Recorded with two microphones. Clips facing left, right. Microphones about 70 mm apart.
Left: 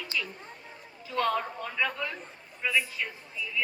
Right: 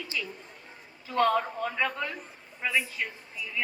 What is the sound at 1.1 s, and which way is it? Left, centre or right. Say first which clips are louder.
Speech: right 3 dB; right.